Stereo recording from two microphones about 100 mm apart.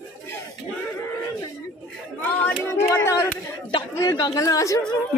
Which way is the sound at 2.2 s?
20° left (ahead or behind).